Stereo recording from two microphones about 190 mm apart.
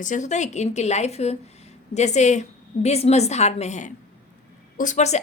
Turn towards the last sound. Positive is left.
turn(degrees=35)  # may be behind; listen again after turning